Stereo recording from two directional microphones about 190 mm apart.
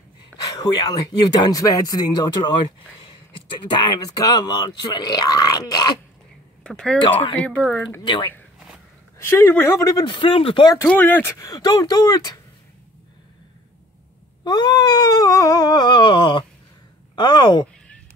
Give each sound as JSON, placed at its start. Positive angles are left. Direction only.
{"t": 0.6, "sound": "speech", "side_deg": 20}
{"t": 6.6, "sound": "speech", "side_deg": 5}
{"t": 7.0, "sound": "speech", "side_deg": 25}
{"t": 7.3, "sound": "speech", "side_deg": 5}
{"t": 8.0, "sound": "speech", "side_deg": 25}
{"t": 9.2, "sound": "speech", "side_deg": 10}
{"t": 10.8, "sound": "speech", "side_deg": 10}
{"t": 14.4, "sound": "speech", "side_deg": 20}